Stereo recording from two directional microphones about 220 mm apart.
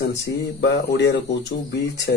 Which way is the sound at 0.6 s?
50° left (ahead or behind).